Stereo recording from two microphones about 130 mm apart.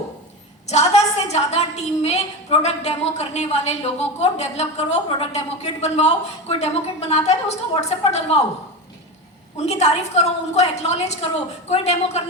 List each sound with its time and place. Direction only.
0.7 s a woman's voice: 60° left (ahead or behind)
9.6 s a woman's voice: 55° left (ahead or behind)